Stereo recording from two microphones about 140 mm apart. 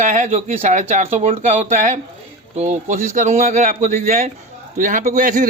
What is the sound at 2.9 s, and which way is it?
A man's voice, 75° right (ahead or behind).